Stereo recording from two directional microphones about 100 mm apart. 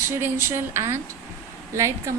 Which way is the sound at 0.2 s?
25° right (ahead or behind).